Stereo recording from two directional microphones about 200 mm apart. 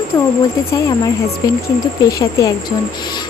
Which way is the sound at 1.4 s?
20° left (ahead or behind).